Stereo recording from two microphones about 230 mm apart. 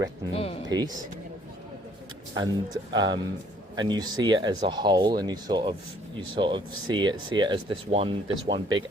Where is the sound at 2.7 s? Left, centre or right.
Centre.